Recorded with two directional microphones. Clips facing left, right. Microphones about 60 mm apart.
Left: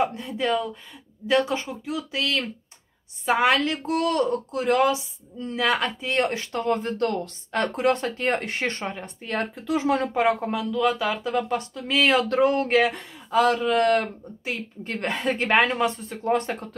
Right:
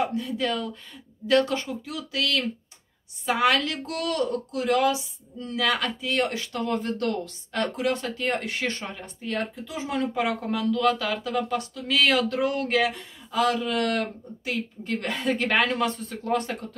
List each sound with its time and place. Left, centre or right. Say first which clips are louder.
0.0 s speech: left 1 dB; left
9.7 s speech: left 9 dB; left
10.1 s speech: left 5 dB; left
10.5 s speech: even; centre
11.1 s speech: left 2 dB; left